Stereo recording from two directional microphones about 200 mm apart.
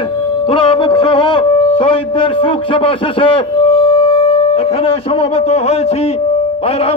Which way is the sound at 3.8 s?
25° left (ahead or behind).